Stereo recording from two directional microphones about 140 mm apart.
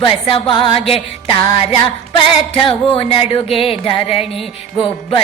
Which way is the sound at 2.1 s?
40° left (ahead or behind).